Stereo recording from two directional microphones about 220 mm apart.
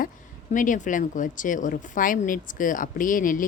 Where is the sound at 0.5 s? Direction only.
35° left (ahead or behind).